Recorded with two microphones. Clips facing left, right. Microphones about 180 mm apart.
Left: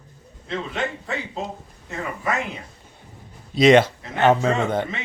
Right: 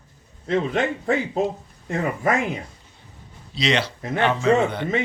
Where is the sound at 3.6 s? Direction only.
50° left (ahead or behind).